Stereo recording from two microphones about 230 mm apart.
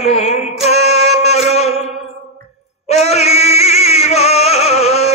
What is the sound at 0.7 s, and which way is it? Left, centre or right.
Music, right.